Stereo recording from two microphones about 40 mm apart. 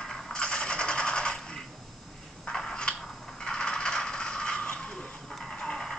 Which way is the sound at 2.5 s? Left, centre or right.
Centre.